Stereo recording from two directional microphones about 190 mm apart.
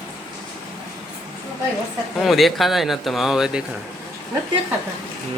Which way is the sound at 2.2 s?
Centre (ahead or behind).